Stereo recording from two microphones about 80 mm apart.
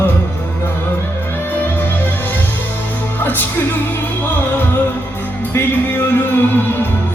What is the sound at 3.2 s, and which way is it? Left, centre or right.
Music, left.